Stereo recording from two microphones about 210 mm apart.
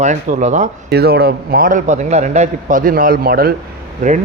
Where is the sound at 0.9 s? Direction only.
50° right (ahead or behind).